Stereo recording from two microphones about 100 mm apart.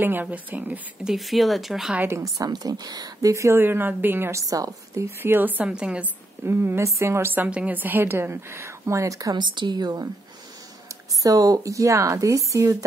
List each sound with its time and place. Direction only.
0.0 s speech: 20° right (ahead or behind)
1.1 s speech: centre (ahead or behind)
2.1 s a woman's voice: 35° right (ahead or behind)
5.2 s speech: 20° right (ahead or behind)
6.4 s a woman's voice: 25° right (ahead or behind)
9.4 s a woman's voice: 50° right (ahead or behind)
11.2 s a woman's voice: 35° right (ahead or behind)